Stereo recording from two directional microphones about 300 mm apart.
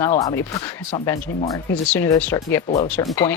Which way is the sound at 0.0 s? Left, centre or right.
Centre.